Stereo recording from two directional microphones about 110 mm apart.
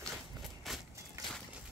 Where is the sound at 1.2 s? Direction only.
30° right (ahead or behind).